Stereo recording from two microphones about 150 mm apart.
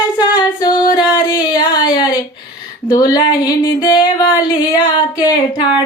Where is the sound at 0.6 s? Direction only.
30° left (ahead or behind).